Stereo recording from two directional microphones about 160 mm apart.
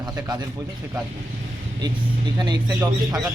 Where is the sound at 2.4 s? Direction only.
25° right (ahead or behind).